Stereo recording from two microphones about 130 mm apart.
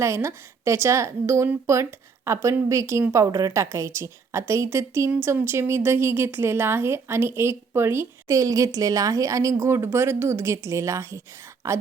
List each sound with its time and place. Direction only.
0.0 s a woman's voice: 20° right (ahead or behind)